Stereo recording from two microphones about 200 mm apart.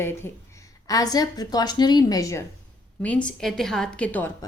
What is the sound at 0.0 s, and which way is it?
A woman's voice, 10° left (ahead or behind).